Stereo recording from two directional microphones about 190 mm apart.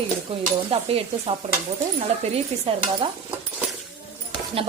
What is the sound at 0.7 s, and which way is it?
Speech, 30° right (ahead or behind).